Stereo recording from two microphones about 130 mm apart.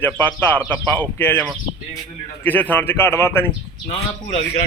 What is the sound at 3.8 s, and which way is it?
Speech, 50° left (ahead or behind).